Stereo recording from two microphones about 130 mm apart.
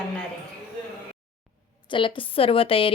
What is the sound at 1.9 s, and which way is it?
A woman's voice, 40° left (ahead or behind).